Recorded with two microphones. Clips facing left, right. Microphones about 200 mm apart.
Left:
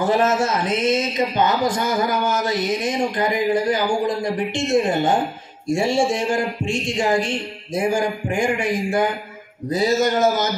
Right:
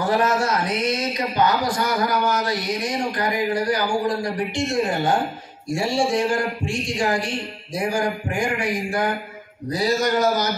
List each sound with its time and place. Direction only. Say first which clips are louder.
0.0 s speech: left 2 dB; 25° left (ahead or behind)